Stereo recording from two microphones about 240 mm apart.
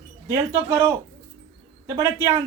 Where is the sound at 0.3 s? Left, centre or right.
Centre.